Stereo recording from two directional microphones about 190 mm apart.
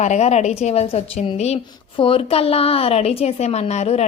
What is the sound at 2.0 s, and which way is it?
A woman's voice, 30° left (ahead or behind).